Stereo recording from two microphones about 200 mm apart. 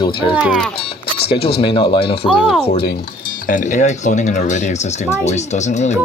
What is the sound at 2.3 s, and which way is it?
Speech, 5° right (ahead or behind).